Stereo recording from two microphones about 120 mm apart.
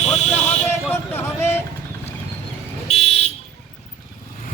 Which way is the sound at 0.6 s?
20° left (ahead or behind).